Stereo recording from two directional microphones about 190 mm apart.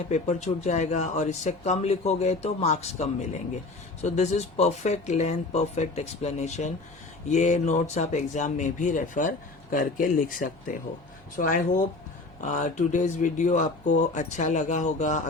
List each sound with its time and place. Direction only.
0.1 s speech: 40° left (ahead or behind)